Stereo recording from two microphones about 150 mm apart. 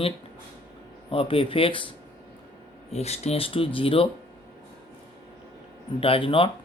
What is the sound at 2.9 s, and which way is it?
Speech, 45° left (ahead or behind).